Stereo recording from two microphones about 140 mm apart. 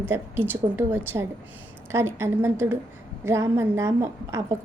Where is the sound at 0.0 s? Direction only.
15° right (ahead or behind).